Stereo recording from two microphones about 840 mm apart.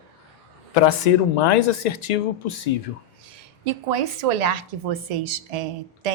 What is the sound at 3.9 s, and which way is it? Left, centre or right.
A woman's voice, right.